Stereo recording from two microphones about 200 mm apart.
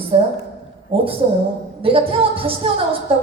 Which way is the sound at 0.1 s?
30° right (ahead or behind).